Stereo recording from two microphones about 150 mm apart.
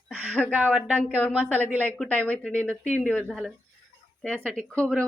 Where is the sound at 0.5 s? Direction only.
5° right (ahead or behind).